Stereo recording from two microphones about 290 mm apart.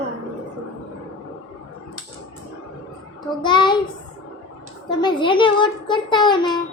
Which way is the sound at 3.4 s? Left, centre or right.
Centre.